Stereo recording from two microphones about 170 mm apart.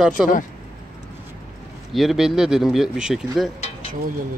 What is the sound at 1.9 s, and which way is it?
Speech, centre (ahead or behind).